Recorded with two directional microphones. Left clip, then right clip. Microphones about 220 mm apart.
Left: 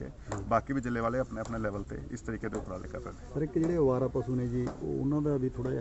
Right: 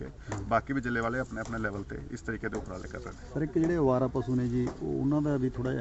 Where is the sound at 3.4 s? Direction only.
35° right (ahead or behind).